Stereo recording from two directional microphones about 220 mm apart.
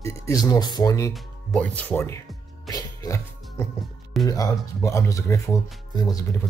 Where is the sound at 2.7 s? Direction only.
15° left (ahead or behind).